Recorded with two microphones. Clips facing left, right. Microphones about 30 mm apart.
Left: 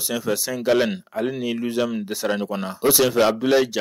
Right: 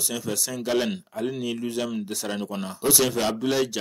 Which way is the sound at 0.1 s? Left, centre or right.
Centre.